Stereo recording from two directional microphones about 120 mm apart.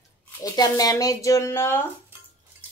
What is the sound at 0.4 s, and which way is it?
A woman's voice, 30° left (ahead or behind).